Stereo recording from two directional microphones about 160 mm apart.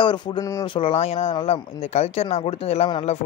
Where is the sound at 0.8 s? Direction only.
35° left (ahead or behind).